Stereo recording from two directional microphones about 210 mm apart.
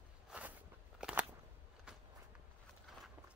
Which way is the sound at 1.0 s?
5° right (ahead or behind).